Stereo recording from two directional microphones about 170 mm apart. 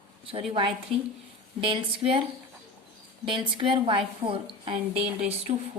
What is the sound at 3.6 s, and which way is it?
A woman's voice, 30° right (ahead or behind).